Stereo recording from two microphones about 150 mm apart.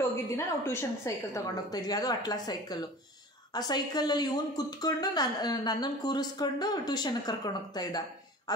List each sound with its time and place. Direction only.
0.1 s speech: 20° left (ahead or behind)